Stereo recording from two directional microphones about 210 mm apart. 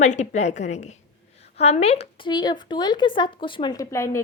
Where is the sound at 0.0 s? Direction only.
35° left (ahead or behind).